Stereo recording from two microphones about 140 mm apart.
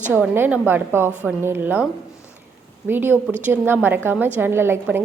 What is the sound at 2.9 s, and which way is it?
A woman's voice, 15° right (ahead or behind).